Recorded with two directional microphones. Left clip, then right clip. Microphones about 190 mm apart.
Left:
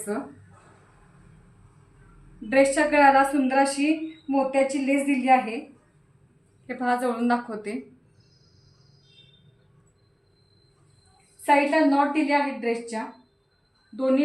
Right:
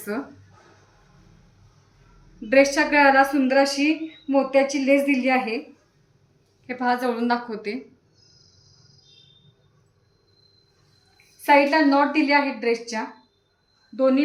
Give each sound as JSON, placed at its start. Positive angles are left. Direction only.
{"t": 2.5, "sound": "a woman's voice", "side_deg": 15}
{"t": 6.7, "sound": "a woman's voice", "side_deg": 15}
{"t": 11.4, "sound": "a woman's voice", "side_deg": 5}